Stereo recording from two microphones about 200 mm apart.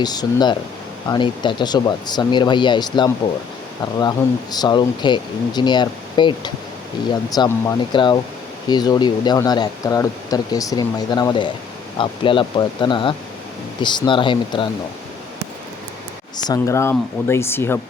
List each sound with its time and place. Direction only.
0.0 s speech: 20° left (ahead or behind)
4.5 s speech: 20° left (ahead or behind)
16.4 s speech: 15° left (ahead or behind)